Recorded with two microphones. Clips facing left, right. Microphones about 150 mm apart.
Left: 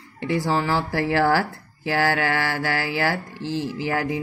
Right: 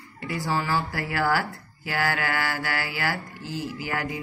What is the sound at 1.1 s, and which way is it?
Speech, 30° left (ahead or behind).